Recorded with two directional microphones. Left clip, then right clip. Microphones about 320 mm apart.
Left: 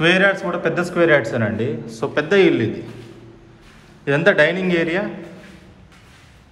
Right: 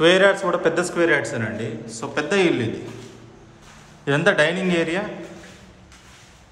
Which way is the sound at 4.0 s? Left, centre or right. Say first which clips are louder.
Left 3 dB; centre.